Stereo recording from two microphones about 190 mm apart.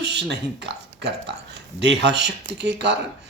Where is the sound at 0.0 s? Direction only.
65° right (ahead or behind).